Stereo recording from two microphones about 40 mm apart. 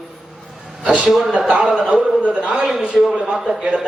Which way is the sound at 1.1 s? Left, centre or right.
Centre.